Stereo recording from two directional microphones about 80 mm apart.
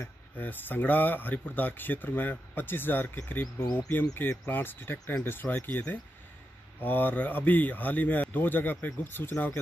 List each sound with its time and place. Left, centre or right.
0.0 s speech: left